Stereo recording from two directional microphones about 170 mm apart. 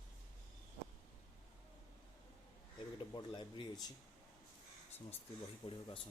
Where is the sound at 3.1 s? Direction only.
25° left (ahead or behind).